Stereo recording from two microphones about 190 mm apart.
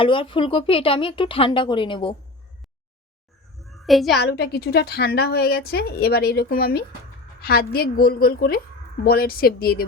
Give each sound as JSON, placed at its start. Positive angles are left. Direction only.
{"t": 0.0, "sound": "a woman's voice", "side_deg": 25}
{"t": 3.6, "sound": "a sound", "side_deg": 0}
{"t": 4.2, "sound": "a woman's voice", "side_deg": 60}